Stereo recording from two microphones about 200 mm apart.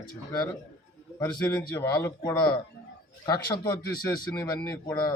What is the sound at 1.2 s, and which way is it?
A man's voice, 20° left (ahead or behind).